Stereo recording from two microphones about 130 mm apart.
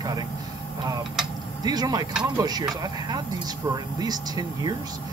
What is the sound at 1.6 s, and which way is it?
Speech, 30° right (ahead or behind).